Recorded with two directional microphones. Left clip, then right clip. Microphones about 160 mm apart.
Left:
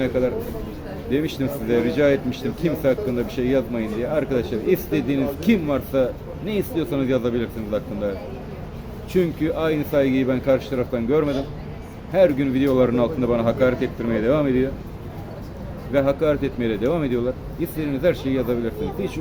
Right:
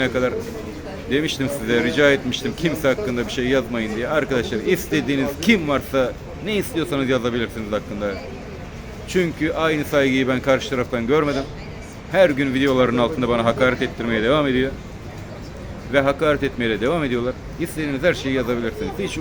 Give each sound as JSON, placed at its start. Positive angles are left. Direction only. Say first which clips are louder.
{"t": 0.0, "sound": "speech", "louder": "right 1 dB", "side_deg": 5}
{"t": 15.9, "sound": "speech", "louder": "right 2 dB", "side_deg": 10}